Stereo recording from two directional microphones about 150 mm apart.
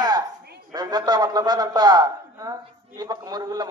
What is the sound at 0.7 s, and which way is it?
A man's voice, 25° right (ahead or behind).